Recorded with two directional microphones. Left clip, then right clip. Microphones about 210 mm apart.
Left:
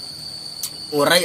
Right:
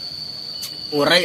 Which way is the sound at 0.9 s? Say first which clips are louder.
Even; 5° left (ahead or behind).